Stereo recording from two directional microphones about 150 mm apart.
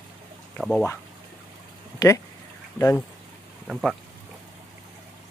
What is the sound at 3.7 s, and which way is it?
Speech, centre (ahead or behind).